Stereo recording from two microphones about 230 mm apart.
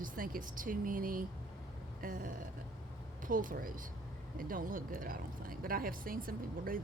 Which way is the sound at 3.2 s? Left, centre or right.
Right.